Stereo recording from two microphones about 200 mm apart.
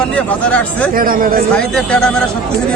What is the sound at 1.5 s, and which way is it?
Speech, 5° left (ahead or behind).